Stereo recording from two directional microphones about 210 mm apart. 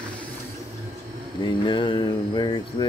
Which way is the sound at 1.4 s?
20° left (ahead or behind).